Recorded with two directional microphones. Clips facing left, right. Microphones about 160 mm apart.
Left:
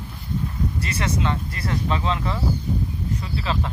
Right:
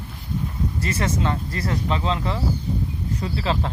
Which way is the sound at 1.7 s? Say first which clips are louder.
Even; 25° right (ahead or behind).